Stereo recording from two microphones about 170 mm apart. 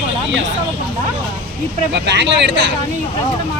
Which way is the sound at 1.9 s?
90° right.